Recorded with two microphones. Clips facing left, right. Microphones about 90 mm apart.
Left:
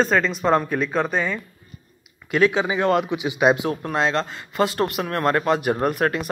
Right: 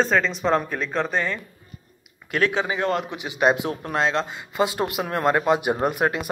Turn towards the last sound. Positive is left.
turn(degrees=-15)  # may be behind; listen again after turning